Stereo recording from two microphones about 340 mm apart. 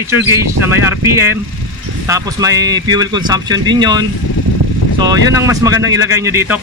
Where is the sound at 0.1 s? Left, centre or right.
Centre.